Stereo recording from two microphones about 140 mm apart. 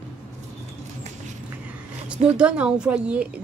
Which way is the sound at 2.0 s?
5° right (ahead or behind).